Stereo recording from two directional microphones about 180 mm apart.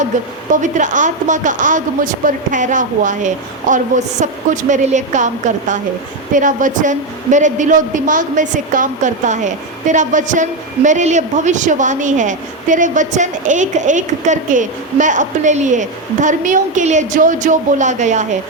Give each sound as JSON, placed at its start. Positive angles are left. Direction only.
{"t": 0.1, "sound": "a woman's voice", "side_deg": -45}